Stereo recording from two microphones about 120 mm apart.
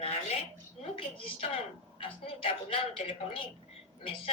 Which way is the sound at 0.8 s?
50° left (ahead or behind).